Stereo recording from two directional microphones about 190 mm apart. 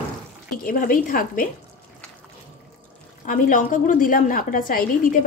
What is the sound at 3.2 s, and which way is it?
A woman's voice, 45° left (ahead or behind).